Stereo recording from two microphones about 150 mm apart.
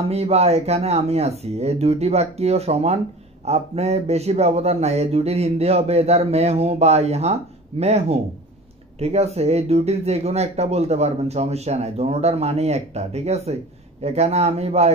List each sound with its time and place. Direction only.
0.1 s speech: 45° right (ahead or behind)